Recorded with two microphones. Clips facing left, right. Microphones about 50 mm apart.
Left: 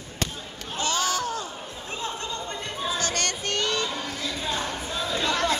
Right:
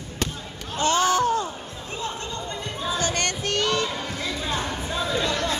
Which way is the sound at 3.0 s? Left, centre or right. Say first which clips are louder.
Right 2 dB; centre.